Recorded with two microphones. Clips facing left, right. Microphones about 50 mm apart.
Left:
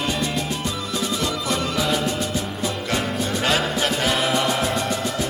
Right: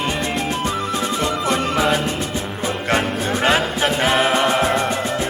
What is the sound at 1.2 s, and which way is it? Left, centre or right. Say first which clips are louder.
Music: right 4 dB; right.